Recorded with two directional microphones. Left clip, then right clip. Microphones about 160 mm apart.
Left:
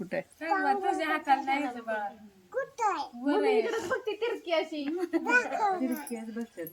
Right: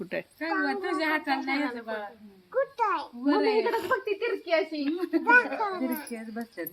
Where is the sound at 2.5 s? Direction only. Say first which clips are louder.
Right 3 dB; 20° left (ahead or behind).